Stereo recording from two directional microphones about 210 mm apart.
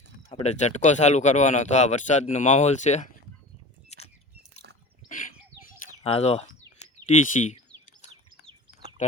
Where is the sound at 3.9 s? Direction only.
30° left (ahead or behind).